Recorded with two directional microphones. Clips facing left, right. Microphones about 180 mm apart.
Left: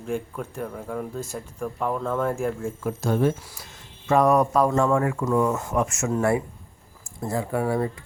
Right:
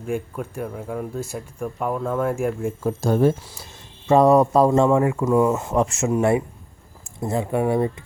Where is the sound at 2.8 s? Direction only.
35° right (ahead or behind).